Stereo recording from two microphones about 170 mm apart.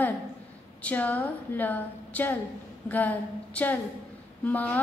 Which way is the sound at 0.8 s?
10° left (ahead or behind).